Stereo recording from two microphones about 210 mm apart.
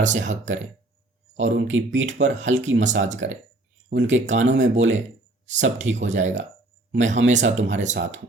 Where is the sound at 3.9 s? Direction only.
65° right (ahead or behind).